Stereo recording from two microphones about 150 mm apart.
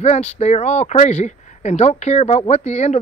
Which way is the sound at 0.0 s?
50° left (ahead or behind).